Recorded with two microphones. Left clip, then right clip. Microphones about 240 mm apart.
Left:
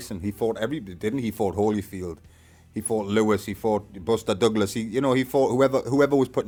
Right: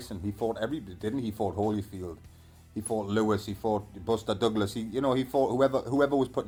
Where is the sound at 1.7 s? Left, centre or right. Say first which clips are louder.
Left 5 dB; left.